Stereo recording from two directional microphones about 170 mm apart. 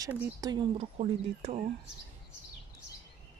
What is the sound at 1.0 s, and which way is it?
Speech, 40° right (ahead or behind).